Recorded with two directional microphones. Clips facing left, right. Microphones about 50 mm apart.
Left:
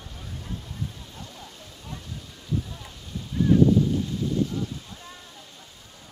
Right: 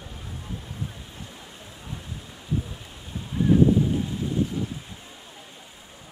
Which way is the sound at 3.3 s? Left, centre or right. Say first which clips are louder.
Even; centre.